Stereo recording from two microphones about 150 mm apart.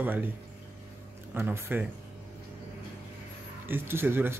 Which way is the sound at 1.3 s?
15° right (ahead or behind).